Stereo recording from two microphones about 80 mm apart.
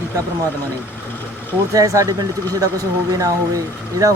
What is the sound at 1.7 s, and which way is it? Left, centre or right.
Speech, right.